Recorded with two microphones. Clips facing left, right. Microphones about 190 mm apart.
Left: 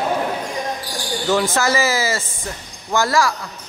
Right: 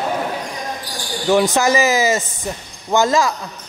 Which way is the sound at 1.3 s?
15° right (ahead or behind).